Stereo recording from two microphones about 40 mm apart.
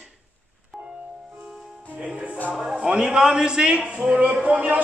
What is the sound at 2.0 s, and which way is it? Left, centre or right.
A man's voice, right.